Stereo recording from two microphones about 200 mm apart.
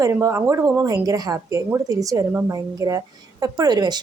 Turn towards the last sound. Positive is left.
turn(degrees=-20)  # may be behind; listen again after turning